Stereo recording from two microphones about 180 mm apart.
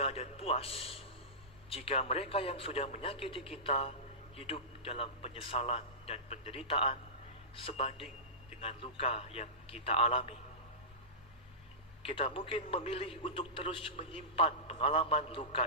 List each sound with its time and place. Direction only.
0.0 s a man's voice: 35° left (ahead or behind)
12.0 s a man's voice: 30° left (ahead or behind)